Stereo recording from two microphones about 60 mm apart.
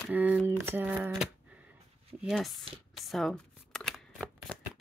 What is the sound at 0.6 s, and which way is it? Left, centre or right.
Speech, right.